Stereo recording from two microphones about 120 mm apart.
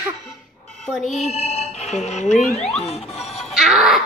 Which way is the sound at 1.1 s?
65° left (ahead or behind).